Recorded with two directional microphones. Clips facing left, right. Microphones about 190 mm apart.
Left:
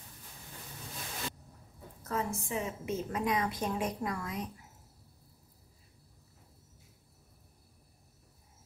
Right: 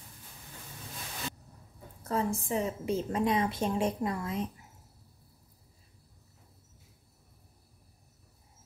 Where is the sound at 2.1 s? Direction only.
30° right (ahead or behind).